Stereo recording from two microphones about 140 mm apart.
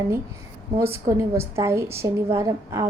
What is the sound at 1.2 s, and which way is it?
A woman's voice, 20° right (ahead or behind).